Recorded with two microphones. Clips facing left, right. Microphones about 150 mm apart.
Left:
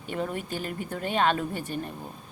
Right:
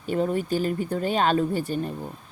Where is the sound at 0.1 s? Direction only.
35° right (ahead or behind).